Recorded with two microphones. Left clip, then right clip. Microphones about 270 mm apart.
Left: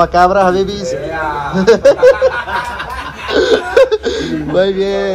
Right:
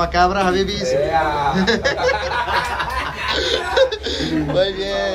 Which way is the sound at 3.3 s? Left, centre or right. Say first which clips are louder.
Left 9 dB; centre.